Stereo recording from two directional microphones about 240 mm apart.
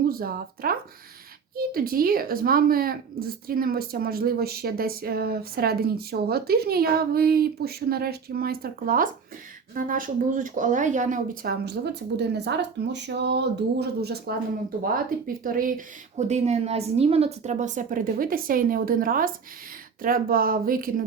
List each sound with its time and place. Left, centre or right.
0.1 s speech: right